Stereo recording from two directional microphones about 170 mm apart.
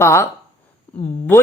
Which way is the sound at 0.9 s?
10° left (ahead or behind).